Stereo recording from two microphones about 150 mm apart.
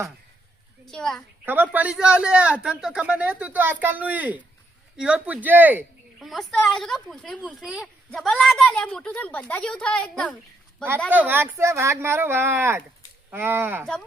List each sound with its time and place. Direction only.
0.9 s a woman's voice: 5° left (ahead or behind)
1.5 s a man's voice: 10° right (ahead or behind)
6.2 s a woman's voice: 5° left (ahead or behind)
7.4 s a man's voice: 5° right (ahead or behind)
11.1 s a man's voice: 10° right (ahead or behind)